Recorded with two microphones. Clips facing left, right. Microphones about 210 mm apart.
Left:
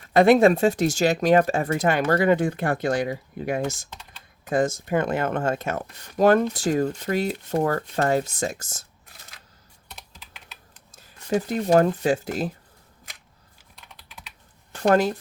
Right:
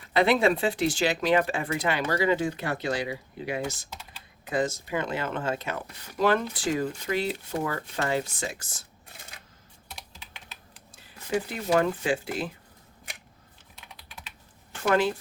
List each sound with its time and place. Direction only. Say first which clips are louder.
0.0 s speech: left 7 dB; 45° left (ahead or behind)
3.8 s computer keyboard: even; 5° right (ahead or behind)
4.4 s speech: left 5 dB; 50° left (ahead or behind)
9.9 s computer keyboard: even; centre (ahead or behind)
10.9 s speech: left 4 dB; 40° left (ahead or behind)
13.7 s typing: even; centre (ahead or behind)
14.7 s a sound: left 4 dB; 40° left (ahead or behind)